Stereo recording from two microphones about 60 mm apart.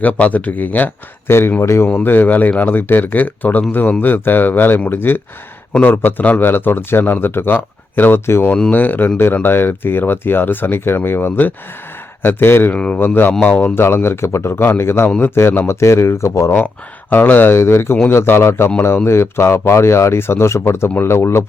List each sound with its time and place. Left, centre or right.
0.0 s speech: left
1.3 s speech: left
12.7 s speech: centre
13.7 s speech: left
17.1 s speech: left
17.6 s speech: left